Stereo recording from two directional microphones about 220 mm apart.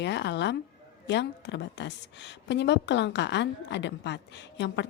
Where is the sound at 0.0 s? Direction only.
50° left (ahead or behind).